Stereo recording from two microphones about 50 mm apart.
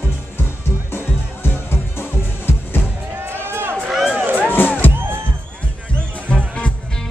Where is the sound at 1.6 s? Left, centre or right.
Left.